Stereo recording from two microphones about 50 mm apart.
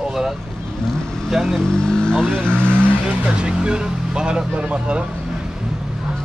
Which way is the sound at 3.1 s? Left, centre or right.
Centre.